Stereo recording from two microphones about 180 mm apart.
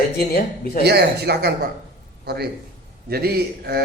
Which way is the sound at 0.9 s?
65° right (ahead or behind).